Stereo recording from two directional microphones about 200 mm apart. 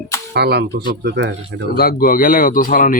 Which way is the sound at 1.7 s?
50° left (ahead or behind).